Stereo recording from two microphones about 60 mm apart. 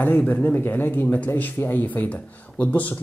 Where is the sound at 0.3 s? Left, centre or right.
Left.